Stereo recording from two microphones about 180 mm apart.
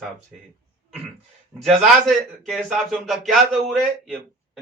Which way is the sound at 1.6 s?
Centre (ahead or behind).